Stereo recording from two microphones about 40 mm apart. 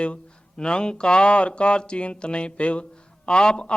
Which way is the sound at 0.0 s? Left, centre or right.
Left.